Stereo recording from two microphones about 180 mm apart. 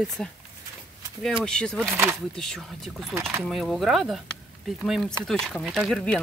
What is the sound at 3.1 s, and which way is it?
Speech, 15° right (ahead or behind).